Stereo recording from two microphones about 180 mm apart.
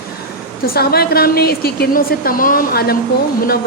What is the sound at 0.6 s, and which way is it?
A woman's voice, 55° left (ahead or behind).